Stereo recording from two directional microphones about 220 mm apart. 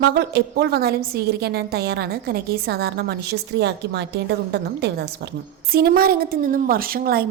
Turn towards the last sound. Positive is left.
turn(degrees=-45)  # may be behind; listen again after turning